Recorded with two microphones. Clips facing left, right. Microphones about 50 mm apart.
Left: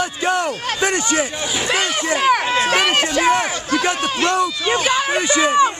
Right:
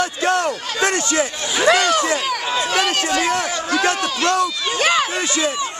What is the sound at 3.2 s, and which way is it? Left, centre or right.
A man's voice, left.